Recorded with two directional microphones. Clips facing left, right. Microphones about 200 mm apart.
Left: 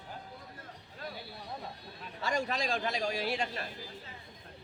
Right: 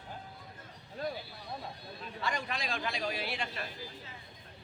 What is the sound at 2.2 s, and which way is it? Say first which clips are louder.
A man's voice: left 4 dB; 40° left (ahead or behind).